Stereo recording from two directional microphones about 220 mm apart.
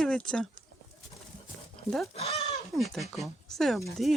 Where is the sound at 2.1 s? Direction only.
30° left (ahead or behind).